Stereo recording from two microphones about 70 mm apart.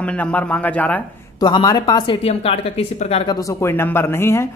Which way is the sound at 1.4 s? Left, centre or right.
Left.